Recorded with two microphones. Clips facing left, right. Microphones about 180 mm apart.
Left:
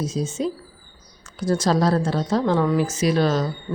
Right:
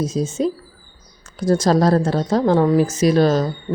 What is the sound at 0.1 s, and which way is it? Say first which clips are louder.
A woman's voice: right 4 dB; 40° right (ahead or behind).